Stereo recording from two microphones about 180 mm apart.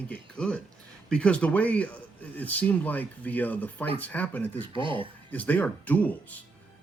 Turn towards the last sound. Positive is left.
turn(degrees=10)  # may be behind; listen again after turning